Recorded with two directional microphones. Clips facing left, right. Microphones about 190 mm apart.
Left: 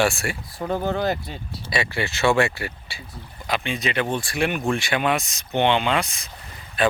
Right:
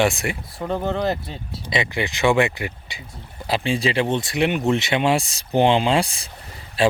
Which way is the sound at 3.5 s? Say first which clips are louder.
Right 4 dB; 30° right (ahead or behind).